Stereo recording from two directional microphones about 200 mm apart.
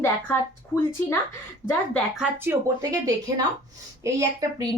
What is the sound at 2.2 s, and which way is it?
A woman's voice, 10° right (ahead or behind).